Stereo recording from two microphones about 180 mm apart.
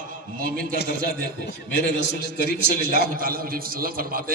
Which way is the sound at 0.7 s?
70° left (ahead or behind).